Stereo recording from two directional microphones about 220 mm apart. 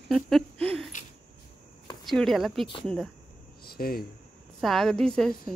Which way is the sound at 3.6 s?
45° left (ahead or behind).